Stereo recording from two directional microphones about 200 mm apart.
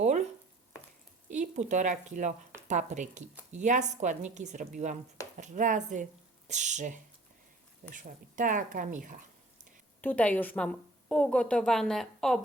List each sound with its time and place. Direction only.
0.0 s stir: 35° right (ahead or behind)
1.3 s speech: 35° right (ahead or behind)
10.0 s a woman's voice: 10° left (ahead or behind)